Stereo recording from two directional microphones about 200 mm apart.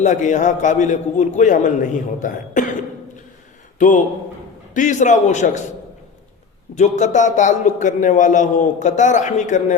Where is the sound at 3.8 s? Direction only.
40° left (ahead or behind).